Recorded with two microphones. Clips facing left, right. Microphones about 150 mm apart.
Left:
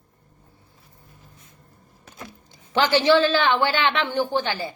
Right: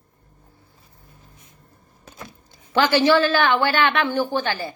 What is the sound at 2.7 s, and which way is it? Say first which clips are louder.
A woman's voice: right 1 dB; 20° left (ahead or behind).